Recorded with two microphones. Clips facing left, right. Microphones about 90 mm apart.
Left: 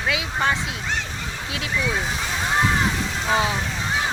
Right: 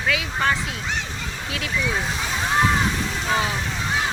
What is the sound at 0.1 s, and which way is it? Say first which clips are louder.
Speech: even; 20° left (ahead or behind).